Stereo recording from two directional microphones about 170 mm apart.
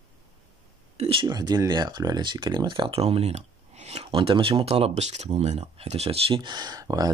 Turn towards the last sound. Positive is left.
turn(degrees=-20)  # may be behind; listen again after turning